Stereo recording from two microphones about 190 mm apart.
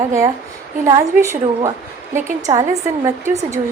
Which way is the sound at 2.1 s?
40° right (ahead or behind).